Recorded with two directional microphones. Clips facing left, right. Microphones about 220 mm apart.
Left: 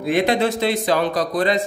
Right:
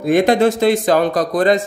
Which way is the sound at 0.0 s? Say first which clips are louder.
Right 5 dB; 45° right (ahead or behind).